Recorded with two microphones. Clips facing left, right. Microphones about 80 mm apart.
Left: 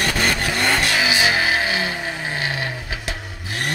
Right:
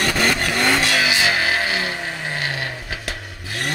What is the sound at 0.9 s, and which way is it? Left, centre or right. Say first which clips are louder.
Vehicle: even; centre.